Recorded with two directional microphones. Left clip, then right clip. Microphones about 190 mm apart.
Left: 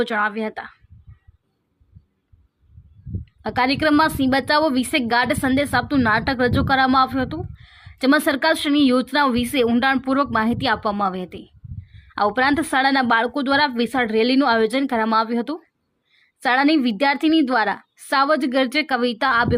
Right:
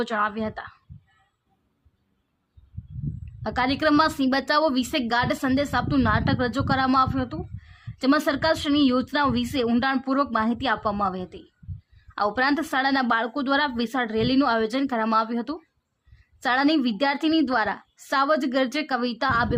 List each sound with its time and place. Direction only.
0.0 s a woman's voice: 20° left (ahead or behind)
3.4 s a woman's voice: 20° left (ahead or behind)